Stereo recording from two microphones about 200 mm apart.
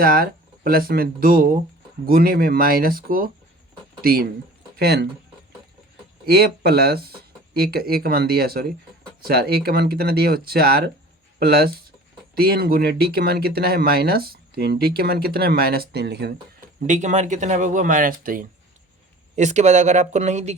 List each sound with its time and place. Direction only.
0.0 s speech: 50° right (ahead or behind)
6.2 s speech: 50° right (ahead or behind)
16.8 s speech: 40° right (ahead or behind)